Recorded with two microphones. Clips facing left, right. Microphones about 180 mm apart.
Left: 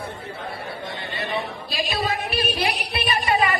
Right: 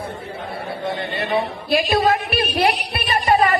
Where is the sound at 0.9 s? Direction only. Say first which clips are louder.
Right 8 dB; 60° right (ahead or behind).